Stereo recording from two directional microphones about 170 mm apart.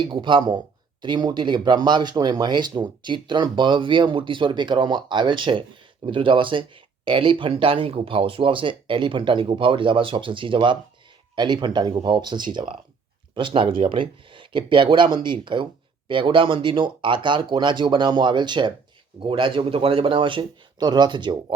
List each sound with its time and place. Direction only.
0.0 s speech: 30° right (ahead or behind)